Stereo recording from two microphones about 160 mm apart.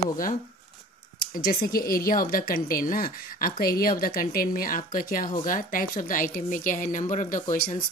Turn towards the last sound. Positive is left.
turn(degrees=55)  # may be behind; listen again after turning